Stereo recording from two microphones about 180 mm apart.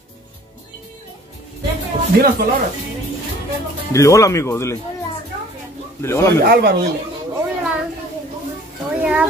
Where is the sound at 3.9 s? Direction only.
15° left (ahead or behind).